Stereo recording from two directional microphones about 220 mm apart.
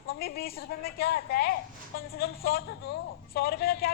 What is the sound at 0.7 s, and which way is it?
A woman's voice, 45° left (ahead or behind).